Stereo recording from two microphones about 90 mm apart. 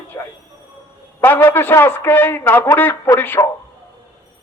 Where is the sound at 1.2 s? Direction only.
25° left (ahead or behind).